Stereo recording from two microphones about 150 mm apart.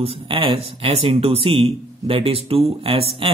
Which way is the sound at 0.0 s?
40° right (ahead or behind).